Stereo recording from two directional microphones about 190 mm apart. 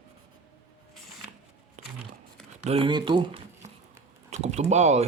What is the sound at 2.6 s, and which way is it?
Speech, 30° right (ahead or behind).